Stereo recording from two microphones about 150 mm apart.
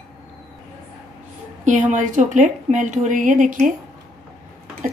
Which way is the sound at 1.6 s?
55° right (ahead or behind).